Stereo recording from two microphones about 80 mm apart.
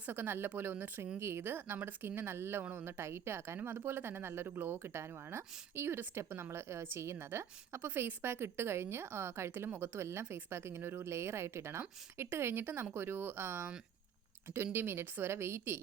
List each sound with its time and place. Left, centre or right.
0.0 s speech: right